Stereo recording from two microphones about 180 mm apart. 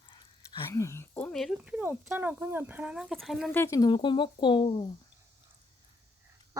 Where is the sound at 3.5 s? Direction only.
15° left (ahead or behind).